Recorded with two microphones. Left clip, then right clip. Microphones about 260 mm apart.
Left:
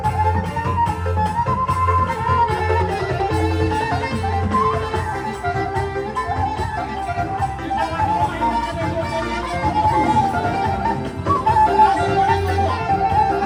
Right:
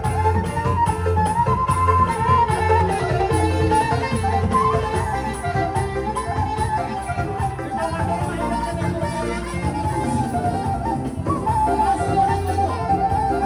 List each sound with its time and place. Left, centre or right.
1.5 s music: centre
11.6 s music: left